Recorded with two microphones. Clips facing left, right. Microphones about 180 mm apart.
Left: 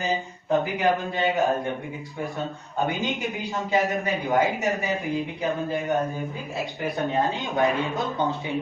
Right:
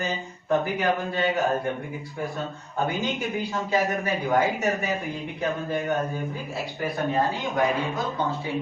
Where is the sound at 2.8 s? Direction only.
20° left (ahead or behind).